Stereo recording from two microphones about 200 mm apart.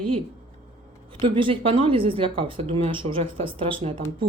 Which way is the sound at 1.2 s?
25° right (ahead or behind).